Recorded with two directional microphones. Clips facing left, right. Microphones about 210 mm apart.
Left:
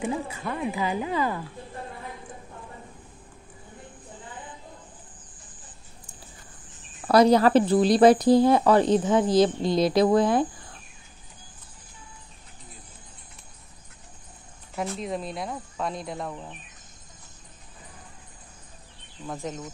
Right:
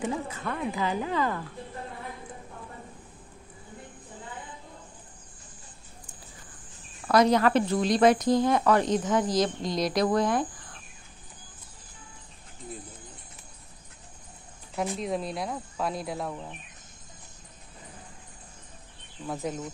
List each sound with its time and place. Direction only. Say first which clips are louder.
0.0 s speech: left 2 dB; 10° left (ahead or behind)
7.1 s speech: left 4 dB; 35° left (ahead or behind)
15.0 s speech: right 1 dB; centre (ahead or behind)
19.2 s speech: right 1 dB; 5° right (ahead or behind)